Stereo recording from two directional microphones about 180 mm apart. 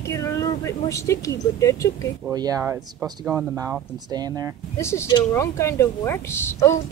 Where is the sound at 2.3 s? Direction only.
20° right (ahead or behind).